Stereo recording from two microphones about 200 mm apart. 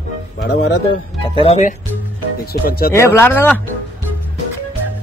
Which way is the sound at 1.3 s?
30° left (ahead or behind).